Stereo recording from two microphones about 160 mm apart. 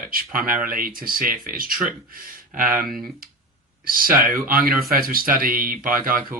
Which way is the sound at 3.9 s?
60° right (ahead or behind).